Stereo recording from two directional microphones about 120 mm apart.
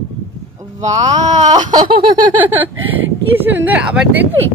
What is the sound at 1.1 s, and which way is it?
Speech, 75° right (ahead or behind).